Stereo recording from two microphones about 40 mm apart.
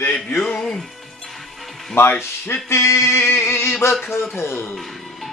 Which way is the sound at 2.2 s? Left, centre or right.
Left.